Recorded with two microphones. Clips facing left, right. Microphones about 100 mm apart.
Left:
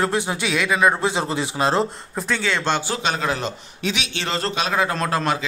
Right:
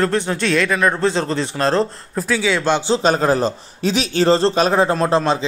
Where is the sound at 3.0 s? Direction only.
40° right (ahead or behind).